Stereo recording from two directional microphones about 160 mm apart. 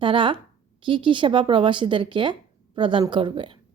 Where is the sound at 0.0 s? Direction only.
30° right (ahead or behind).